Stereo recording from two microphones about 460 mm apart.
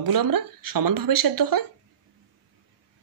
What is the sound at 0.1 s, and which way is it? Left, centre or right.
Speech, right.